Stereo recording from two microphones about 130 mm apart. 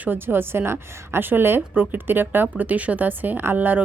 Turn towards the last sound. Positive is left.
turn(degrees=-15)  # may be behind; listen again after turning